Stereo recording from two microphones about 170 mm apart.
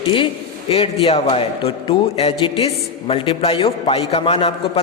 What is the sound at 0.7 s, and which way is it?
A man's voice, 35° left (ahead or behind).